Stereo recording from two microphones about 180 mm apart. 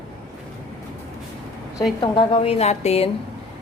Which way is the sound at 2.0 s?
30° left (ahead or behind).